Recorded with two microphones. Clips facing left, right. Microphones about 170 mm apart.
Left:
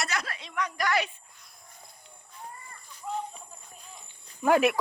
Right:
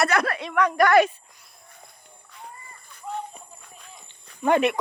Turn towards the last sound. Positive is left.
turn(degrees=5)  # may be behind; listen again after turning